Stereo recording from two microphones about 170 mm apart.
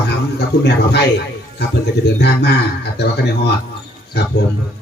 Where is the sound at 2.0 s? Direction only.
80° left.